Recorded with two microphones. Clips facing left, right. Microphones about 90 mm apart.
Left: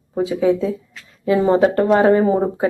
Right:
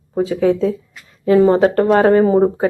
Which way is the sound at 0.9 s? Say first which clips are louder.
Even; 5° right (ahead or behind).